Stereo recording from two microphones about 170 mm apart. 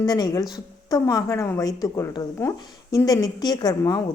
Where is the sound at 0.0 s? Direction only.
25° left (ahead or behind).